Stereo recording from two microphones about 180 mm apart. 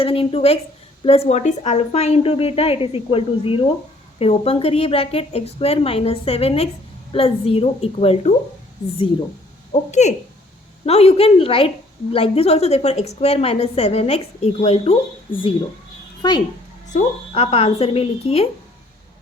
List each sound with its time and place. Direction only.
0.0 s a woman's voice: 30° left (ahead or behind)
9.7 s a woman's voice: 40° left (ahead or behind); by 16.4 s 20° left (ahead or behind)
16.9 s a woman's voice: 35° left (ahead or behind)